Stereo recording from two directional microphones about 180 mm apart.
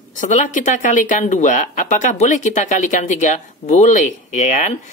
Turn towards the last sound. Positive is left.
turn(degrees=40)  # may be behind; listen again after turning